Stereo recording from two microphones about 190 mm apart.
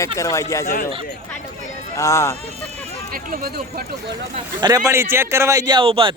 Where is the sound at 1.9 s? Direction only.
15° left (ahead or behind).